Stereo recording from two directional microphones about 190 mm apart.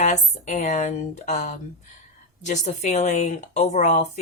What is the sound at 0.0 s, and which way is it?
A woman's voice, 40° left (ahead or behind).